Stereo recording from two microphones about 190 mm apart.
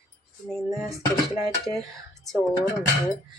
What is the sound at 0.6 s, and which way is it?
Speech, 15° right (ahead or behind).